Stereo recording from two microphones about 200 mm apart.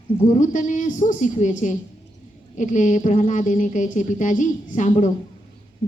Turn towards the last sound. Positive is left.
turn(degrees=35)  # may be behind; listen again after turning